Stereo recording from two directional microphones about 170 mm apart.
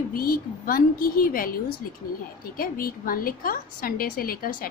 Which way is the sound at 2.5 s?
60° left (ahead or behind).